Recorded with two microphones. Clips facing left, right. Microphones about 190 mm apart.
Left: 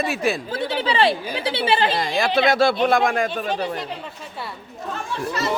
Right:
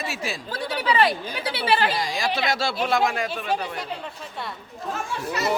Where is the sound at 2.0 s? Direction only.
60° left (ahead or behind).